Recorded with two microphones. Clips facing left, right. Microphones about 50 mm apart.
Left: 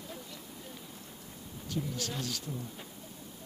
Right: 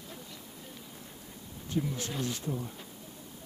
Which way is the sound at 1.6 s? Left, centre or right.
Right.